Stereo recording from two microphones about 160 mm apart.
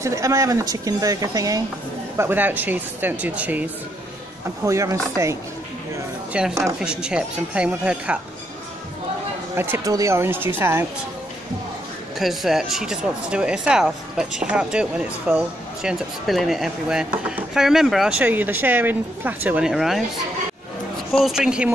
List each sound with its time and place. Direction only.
0.0 s speech: 20° right (ahead or behind)
2.1 s speech: 10° right (ahead or behind)
4.6 s speech: 20° right (ahead or behind)
6.6 s speech: 5° right (ahead or behind)
9.6 s speech: 15° right (ahead or behind)
12.2 s speech: centre (ahead or behind)
21.1 s speech: centre (ahead or behind)